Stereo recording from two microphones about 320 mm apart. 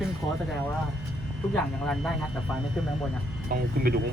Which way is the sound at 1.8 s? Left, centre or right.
Centre.